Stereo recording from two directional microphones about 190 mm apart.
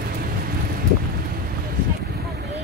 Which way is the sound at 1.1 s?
55° right (ahead or behind).